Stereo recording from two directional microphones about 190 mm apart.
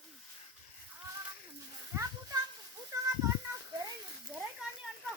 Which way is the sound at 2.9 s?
15° right (ahead or behind).